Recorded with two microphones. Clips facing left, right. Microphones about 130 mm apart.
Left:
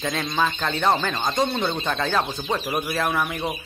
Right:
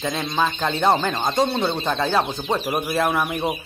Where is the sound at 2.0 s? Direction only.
20° right (ahead or behind).